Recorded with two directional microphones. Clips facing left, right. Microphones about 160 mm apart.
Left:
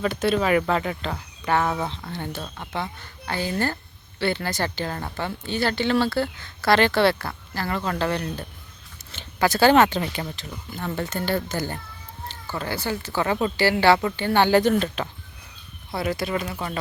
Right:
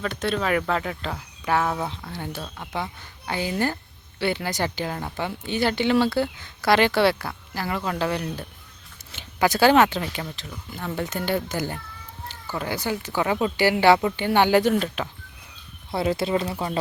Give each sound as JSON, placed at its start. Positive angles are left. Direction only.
{"t": 0.0, "sound": "speech", "side_deg": 5}
{"t": 11.0, "sound": "speech", "side_deg": -15}
{"t": 15.9, "sound": "speech", "side_deg": -25}